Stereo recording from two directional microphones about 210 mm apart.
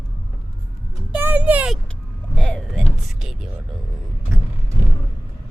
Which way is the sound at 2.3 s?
5° left (ahead or behind).